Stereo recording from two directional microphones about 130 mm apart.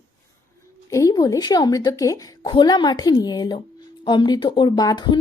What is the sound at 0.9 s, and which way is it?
A woman's voice, 25° left (ahead or behind).